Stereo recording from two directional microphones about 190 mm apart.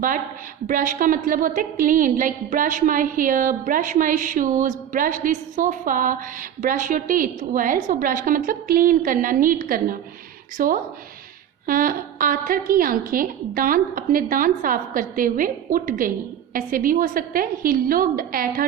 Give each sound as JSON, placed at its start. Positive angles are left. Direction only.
{"t": 0.7, "sound": "a woman's voice", "side_deg": -45}